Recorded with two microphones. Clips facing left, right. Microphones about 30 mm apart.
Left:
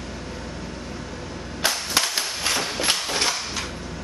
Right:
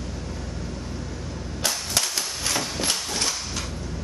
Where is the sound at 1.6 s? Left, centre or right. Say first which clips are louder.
Left 3 dB; left.